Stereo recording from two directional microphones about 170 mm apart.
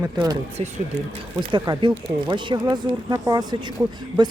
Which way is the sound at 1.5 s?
30° right (ahead or behind).